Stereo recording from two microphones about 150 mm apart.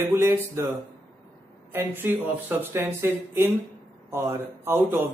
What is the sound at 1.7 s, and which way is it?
Speech, 15° right (ahead or behind).